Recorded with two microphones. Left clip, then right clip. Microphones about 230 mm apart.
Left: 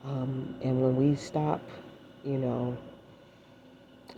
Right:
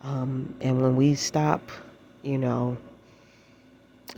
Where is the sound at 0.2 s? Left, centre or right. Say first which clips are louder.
Right 3 dB; right.